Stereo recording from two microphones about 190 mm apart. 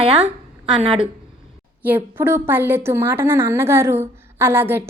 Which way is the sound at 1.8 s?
10° right (ahead or behind).